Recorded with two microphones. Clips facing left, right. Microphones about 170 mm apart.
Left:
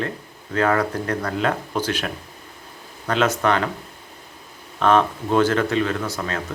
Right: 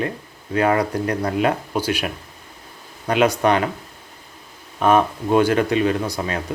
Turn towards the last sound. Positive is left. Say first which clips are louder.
# right 3 dB
turn(degrees=-15)  # may be behind; listen again after turning